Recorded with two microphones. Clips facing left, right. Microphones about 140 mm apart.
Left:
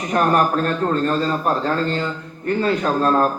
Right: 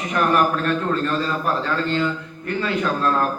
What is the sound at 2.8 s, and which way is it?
Speech, 35° left (ahead or behind).